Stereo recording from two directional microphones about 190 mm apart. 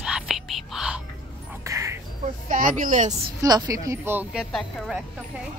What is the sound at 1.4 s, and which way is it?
Music, 15° right (ahead or behind).